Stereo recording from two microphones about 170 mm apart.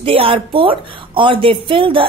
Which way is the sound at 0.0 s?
35° right (ahead or behind).